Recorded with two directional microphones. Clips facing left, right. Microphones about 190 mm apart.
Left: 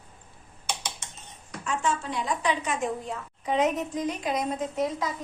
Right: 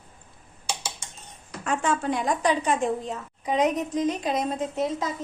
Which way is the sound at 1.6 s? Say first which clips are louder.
Right 4 dB; 55° right (ahead or behind).